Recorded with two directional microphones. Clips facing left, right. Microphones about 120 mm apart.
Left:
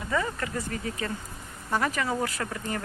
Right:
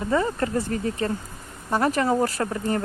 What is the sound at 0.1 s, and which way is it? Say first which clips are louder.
Speech: right 6 dB; 35° right (ahead or behind).